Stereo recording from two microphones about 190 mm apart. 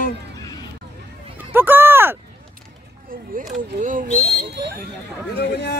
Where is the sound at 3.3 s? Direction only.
45° right (ahead or behind).